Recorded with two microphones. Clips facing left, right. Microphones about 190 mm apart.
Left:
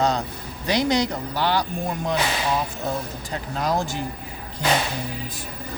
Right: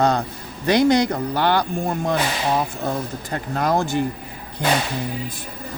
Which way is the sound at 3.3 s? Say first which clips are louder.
Right 3 dB; 55° right (ahead or behind).